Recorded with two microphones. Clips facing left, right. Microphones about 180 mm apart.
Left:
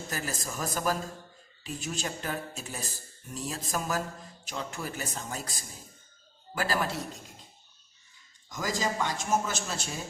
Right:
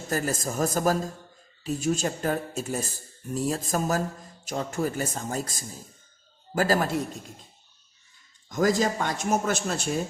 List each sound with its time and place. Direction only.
0.1 s a woman's voice: 45° right (ahead or behind)
8.4 s speech: 50° right (ahead or behind)